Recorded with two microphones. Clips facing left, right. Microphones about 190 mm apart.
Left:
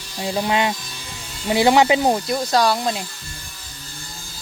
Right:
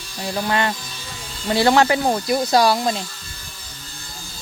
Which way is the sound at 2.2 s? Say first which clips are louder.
Right 2 dB; 10° right (ahead or behind).